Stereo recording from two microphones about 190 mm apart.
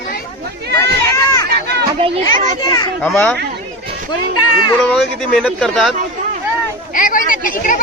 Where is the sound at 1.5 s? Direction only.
60° right (ahead or behind).